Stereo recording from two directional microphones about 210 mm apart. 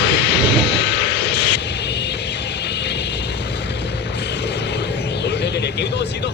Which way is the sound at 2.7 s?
55° left (ahead or behind).